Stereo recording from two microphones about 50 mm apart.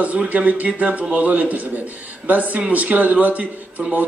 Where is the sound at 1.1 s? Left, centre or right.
Right.